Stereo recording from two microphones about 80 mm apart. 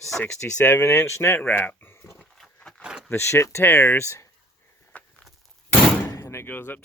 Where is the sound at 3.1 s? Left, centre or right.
Left.